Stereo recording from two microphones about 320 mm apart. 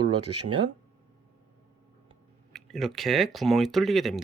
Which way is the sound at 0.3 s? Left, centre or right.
Right.